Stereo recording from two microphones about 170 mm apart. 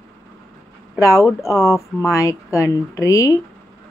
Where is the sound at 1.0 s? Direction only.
15° left (ahead or behind).